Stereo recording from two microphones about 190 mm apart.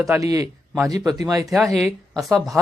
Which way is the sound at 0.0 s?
15° right (ahead or behind).